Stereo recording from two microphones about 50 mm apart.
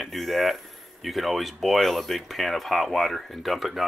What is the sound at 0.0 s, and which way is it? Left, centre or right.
Speech, centre.